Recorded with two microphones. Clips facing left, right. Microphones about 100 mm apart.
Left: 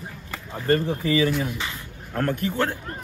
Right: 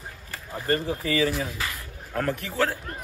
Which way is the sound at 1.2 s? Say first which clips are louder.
Left 1 dB; centre (ahead or behind).